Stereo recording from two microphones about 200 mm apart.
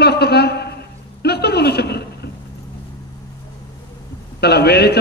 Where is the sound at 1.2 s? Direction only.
55° left (ahead or behind).